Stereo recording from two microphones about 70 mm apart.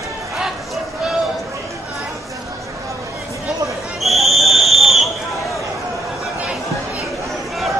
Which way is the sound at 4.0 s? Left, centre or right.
Centre.